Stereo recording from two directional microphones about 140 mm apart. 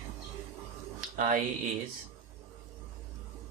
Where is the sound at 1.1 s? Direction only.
70° right (ahead or behind).